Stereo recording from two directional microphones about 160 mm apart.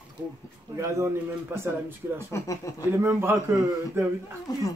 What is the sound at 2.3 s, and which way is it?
Speech, 20° left (ahead or behind).